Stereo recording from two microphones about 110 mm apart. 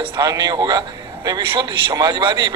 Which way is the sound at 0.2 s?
35° right (ahead or behind).